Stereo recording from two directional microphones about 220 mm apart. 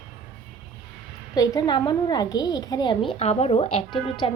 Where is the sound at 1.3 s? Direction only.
15° left (ahead or behind).